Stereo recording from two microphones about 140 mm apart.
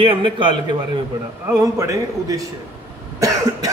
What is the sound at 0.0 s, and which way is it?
Speech, 40° right (ahead or behind).